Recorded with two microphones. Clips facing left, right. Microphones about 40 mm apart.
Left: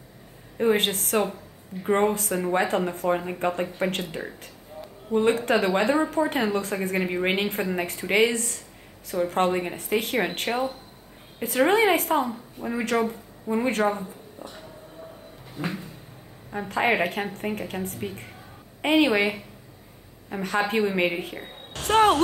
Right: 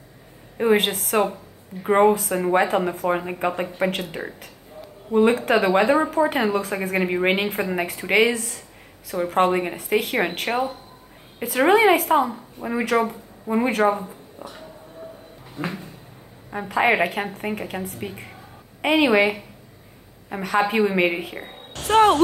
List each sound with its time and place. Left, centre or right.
0.6 s a woman's voice: centre
5.1 s a woman's voice: centre
14.4 s speech: right
15.5 s a sound: centre
16.4 s a woman's voice: centre